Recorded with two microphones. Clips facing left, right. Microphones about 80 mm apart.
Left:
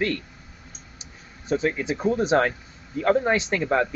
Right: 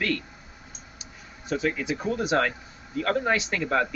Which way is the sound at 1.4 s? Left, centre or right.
Left.